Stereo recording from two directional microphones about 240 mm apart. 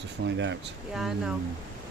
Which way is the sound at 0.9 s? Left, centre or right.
Centre.